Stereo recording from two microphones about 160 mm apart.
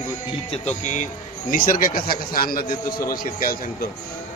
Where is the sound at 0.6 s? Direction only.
50° left (ahead or behind).